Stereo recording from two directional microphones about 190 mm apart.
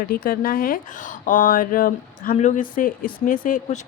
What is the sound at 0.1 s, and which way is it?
Speech, 50° left (ahead or behind).